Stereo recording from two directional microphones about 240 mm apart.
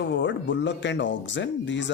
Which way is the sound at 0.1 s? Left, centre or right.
Left.